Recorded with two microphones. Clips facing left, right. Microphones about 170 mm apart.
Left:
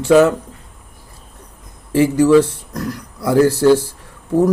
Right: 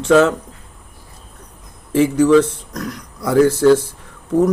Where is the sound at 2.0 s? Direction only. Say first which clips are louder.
Left 1 dB; 10° left (ahead or behind).